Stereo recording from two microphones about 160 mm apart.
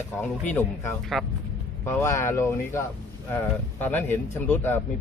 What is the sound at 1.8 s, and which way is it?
Speech, 15° left (ahead or behind).